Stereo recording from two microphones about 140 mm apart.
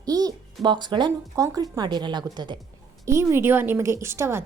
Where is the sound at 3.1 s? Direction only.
20° right (ahead or behind).